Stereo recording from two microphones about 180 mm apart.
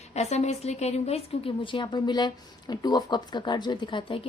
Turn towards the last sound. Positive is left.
turn(degrees=30)  # may be behind; listen again after turning